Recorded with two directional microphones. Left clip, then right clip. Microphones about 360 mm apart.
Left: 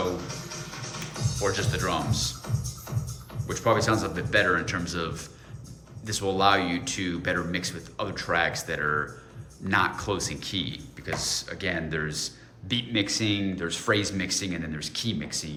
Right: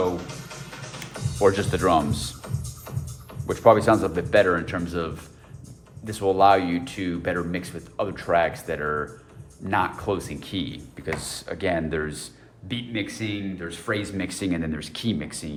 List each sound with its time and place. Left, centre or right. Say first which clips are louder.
1.4 s speech: right 8 dB; centre
3.4 s speech: right 7 dB; centre
14.3 s speech: right 2 dB; centre